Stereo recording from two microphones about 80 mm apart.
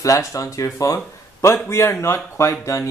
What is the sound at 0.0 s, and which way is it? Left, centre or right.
A man's voice, left.